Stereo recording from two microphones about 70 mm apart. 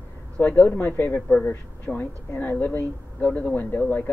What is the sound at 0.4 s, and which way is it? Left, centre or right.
A woman's voice, left.